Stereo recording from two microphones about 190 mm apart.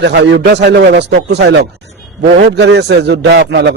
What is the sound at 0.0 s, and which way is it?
A man's voice, 65° right (ahead or behind).